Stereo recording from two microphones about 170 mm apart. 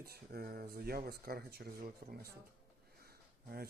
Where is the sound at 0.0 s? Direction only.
65° right (ahead or behind).